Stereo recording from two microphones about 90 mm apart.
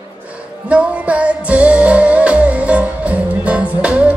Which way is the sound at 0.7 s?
15° right (ahead or behind).